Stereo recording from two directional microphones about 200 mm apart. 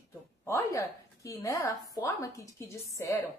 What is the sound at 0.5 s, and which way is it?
A woman's voice, 15° left (ahead or behind).